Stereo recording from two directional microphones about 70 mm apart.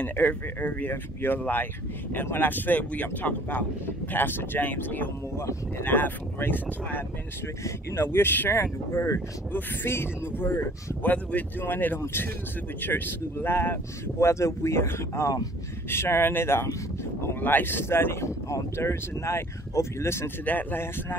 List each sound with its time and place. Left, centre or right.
0.0 s speech: left
5.4 s speech: left
5.9 s speech: left
8.9 s speech: left
9.5 s speech: left
14.2 s speech: left
20.4 s speech: left